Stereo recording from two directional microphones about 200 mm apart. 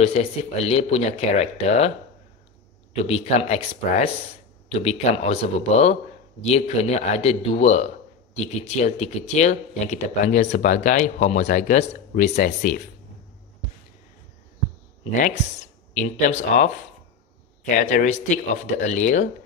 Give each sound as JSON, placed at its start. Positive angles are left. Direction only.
{"t": 0.0, "sound": "speech", "side_deg": 30}
{"t": 2.9, "sound": "speech", "side_deg": 30}
{"t": 15.1, "sound": "speech", "side_deg": 40}
{"t": 17.7, "sound": "speech", "side_deg": 40}